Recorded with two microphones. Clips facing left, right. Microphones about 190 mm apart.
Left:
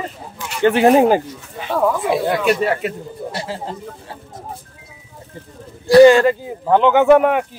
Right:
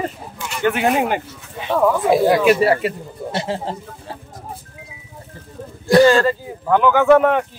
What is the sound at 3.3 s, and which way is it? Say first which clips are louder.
Speech: right 6 dB; 30° right (ahead or behind).